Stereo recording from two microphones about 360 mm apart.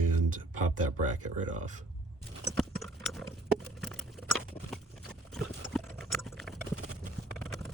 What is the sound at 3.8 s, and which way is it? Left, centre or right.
Patter, centre.